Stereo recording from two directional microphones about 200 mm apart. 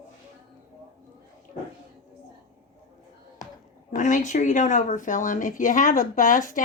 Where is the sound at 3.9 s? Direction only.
40° left (ahead or behind).